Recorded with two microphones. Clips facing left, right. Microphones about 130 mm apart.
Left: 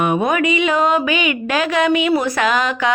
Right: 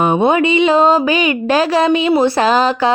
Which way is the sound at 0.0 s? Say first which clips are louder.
Right 4 dB; 30° right (ahead or behind).